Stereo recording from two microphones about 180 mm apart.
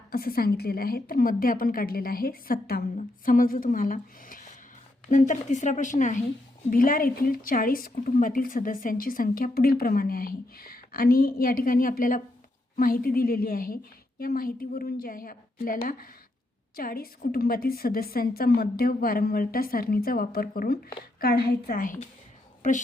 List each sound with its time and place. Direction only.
0.1 s a woman's voice: 55° left (ahead or behind)